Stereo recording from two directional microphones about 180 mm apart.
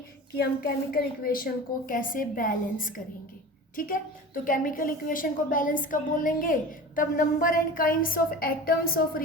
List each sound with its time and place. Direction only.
0.3 s a woman's voice: 60° left (ahead or behind)